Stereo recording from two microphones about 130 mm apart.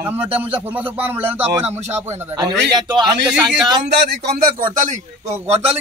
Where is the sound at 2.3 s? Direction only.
30° right (ahead or behind).